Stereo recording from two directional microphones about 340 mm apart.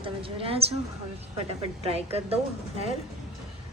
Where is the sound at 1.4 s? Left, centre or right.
Centre.